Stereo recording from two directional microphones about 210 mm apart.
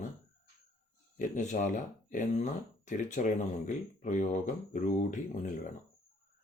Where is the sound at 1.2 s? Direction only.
35° left (ahead or behind).